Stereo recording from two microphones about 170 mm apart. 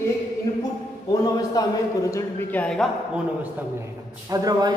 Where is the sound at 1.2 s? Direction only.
20° left (ahead or behind).